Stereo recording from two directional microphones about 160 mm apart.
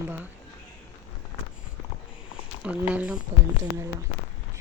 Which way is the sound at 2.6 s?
10° right (ahead or behind).